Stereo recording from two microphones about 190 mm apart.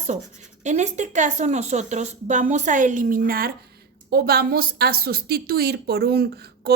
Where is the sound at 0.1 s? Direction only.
40° right (ahead or behind).